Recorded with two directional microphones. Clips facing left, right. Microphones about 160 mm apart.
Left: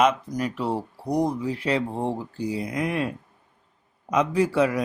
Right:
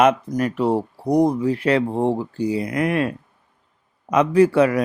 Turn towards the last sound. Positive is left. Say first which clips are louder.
# right 6 dB
turn(degrees=-60)  # may be behind; listen again after turning